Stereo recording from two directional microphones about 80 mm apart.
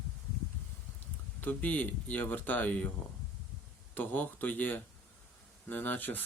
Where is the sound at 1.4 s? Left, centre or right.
Centre.